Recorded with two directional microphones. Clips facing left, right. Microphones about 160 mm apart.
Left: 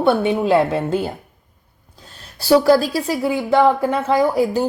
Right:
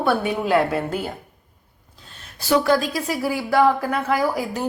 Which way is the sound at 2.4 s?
35° left (ahead or behind).